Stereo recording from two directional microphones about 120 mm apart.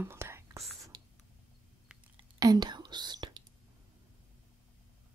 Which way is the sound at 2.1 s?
35° right (ahead or behind).